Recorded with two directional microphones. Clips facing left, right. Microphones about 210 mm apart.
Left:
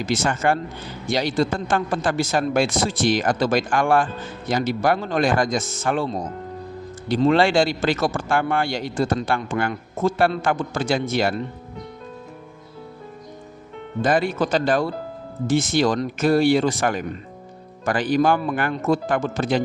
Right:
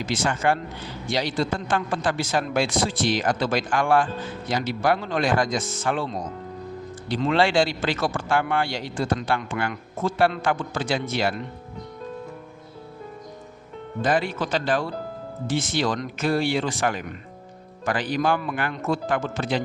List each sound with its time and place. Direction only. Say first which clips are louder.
0.0 s a man's voice: left 2 dB; 45° left (ahead or behind)
14.0 s a man's voice: left 4 dB; 45° left (ahead or behind)